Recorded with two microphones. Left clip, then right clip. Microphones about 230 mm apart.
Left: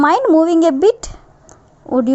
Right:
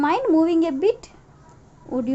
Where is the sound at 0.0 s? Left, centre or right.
Left.